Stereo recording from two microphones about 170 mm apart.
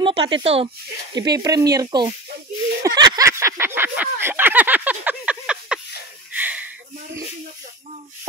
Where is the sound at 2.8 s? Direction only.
25° right (ahead or behind).